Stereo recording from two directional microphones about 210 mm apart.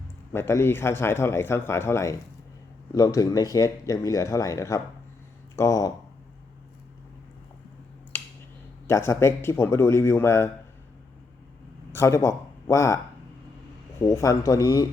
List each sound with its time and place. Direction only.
0.3 s speech: 10° left (ahead or behind)
8.1 s finger snapping: 10° left (ahead or behind)
8.9 s speech: 10° left (ahead or behind)
11.9 s speech: 15° left (ahead or behind)
14.0 s speech: 15° left (ahead or behind)